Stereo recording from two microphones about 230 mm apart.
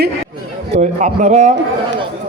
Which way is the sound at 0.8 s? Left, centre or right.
Right.